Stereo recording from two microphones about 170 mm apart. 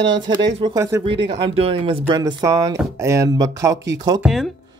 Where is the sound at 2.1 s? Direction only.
20° right (ahead or behind).